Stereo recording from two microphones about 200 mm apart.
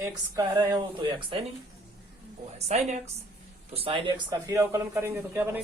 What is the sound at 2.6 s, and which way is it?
A woman's voice, 35° right (ahead or behind).